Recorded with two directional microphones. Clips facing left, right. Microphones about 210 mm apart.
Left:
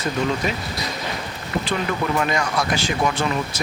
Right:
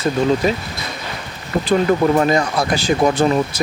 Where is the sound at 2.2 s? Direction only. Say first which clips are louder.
Right 6 dB; 35° right (ahead or behind).